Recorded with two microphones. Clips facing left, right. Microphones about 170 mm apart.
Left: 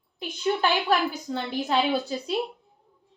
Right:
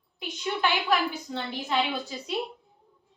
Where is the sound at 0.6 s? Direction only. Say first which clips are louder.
Even; 40° left (ahead or behind).